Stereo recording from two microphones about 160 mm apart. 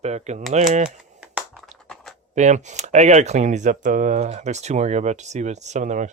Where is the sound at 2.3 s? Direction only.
45° right (ahead or behind).